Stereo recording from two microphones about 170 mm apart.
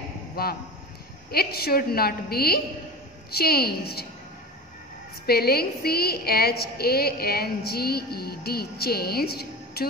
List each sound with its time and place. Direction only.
0.4 s a woman's voice: 65° left (ahead or behind)
5.2 s a woman's voice: 65° left (ahead or behind)